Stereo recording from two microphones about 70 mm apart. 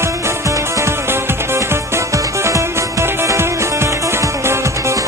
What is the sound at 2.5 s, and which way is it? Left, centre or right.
Music, right.